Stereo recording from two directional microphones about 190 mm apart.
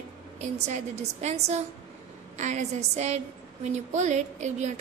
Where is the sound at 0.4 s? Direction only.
40° right (ahead or behind).